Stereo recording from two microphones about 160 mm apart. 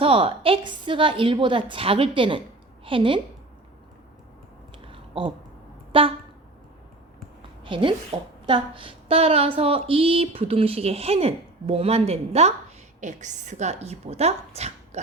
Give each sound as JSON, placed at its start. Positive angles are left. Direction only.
{"t": 0.0, "sound": "a woman's voice", "side_deg": -35}
{"t": 4.9, "sound": "a sound", "side_deg": -35}
{"t": 5.9, "sound": "vehicle horn", "side_deg": -35}
{"t": 7.6, "sound": "a woman's voice", "side_deg": -30}